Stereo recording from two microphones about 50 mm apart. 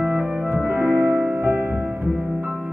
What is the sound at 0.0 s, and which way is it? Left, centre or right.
Music, right.